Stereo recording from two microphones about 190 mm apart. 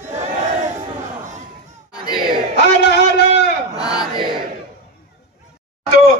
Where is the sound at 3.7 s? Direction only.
20° left (ahead or behind).